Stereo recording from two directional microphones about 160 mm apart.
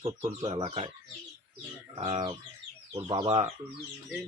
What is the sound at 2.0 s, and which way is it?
Speech, 35° right (ahead or behind).